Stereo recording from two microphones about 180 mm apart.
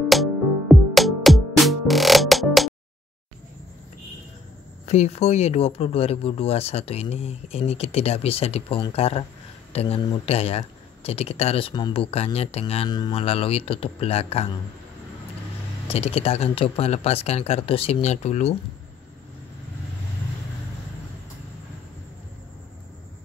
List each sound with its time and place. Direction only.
0.1 s music: centre (ahead or behind)
4.8 s speech: 40° left (ahead or behind)
15.9 s speech: 35° left (ahead or behind)